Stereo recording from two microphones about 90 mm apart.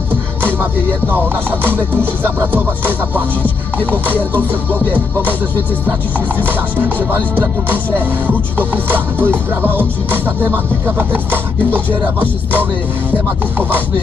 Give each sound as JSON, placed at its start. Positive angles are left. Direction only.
{"t": 0.4, "sound": "music", "side_deg": -25}
{"t": 6.1, "sound": "music", "side_deg": -20}